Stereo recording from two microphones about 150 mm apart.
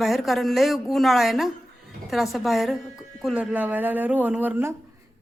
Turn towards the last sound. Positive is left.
turn(degrees=-15)  # may be behind; listen again after turning